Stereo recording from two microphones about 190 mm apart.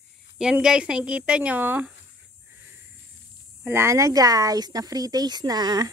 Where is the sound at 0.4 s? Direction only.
5° right (ahead or behind).